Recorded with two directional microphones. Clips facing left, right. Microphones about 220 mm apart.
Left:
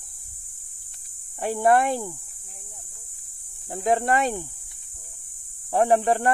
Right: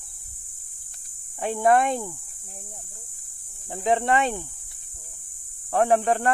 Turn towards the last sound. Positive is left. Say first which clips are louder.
# left 1 dB
turn(degrees=10)  # may be behind; listen again after turning